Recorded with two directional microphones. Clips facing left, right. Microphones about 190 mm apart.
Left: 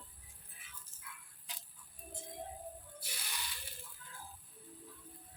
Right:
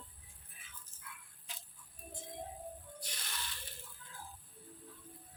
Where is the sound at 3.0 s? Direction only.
10° left (ahead or behind).